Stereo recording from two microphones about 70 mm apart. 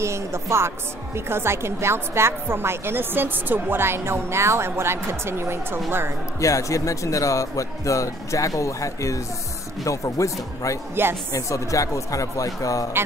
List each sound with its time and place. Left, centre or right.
0.0 s a woman's voice: right
6.4 s speech: left